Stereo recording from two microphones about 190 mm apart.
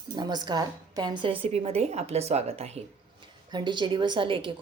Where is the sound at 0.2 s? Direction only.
25° right (ahead or behind).